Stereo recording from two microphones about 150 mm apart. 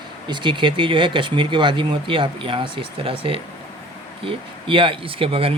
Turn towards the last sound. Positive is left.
turn(degrees=-40)  # may be behind; listen again after turning